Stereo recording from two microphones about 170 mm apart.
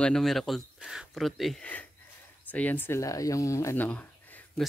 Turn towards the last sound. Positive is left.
turn(degrees=10)  # may be behind; listen again after turning